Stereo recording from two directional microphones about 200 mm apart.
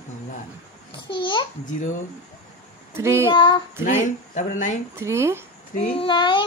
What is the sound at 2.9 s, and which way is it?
Speech, 15° right (ahead or behind).